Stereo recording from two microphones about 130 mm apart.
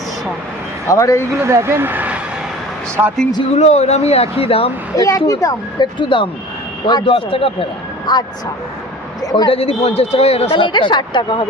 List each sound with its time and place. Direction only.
0.9 s speech: 25° left (ahead or behind)
1.4 s speech: 20° right (ahead or behind)
3.5 s speech: 60° left (ahead or behind)
4.9 s a man's voice: 25° left (ahead or behind); by 8.1 s 45° left (ahead or behind)
9.2 s a man's voice: 30° left (ahead or behind)
9.5 s speech: 50° left (ahead or behind)